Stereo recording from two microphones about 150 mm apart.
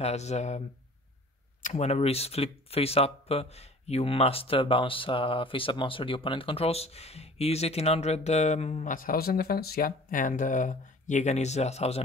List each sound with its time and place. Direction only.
0.0 s speech: 45° left (ahead or behind)